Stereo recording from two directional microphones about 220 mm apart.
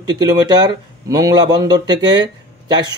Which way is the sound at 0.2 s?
15° right (ahead or behind).